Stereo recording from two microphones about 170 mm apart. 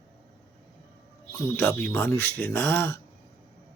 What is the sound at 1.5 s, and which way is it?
Speech, 10° left (ahead or behind).